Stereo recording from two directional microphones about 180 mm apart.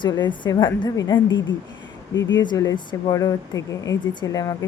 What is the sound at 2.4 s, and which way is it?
Speech, 20° left (ahead or behind).